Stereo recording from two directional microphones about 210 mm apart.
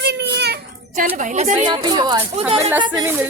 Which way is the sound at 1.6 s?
20° right (ahead or behind).